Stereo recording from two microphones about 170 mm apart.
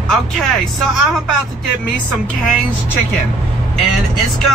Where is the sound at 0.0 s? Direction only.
5° left (ahead or behind).